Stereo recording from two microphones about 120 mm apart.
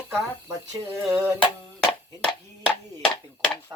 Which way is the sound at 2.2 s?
10° left (ahead or behind).